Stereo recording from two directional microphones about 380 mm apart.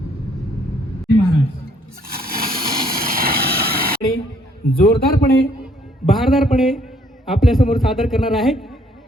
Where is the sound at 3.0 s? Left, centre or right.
Right.